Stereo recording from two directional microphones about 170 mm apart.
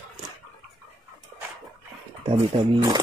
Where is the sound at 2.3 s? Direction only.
30° right (ahead or behind).